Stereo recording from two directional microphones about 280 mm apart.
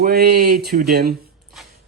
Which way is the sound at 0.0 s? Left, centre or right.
Right.